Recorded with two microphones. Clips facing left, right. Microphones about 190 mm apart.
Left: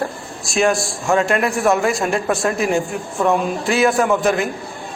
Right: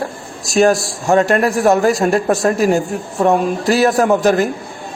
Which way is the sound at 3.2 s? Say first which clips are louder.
Right 4 dB; 40° right (ahead or behind).